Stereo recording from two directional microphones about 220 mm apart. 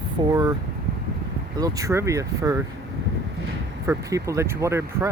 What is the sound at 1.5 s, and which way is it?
Speech, 15° right (ahead or behind).